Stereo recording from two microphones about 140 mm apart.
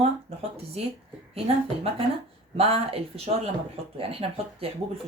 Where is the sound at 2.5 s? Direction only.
45° right (ahead or behind).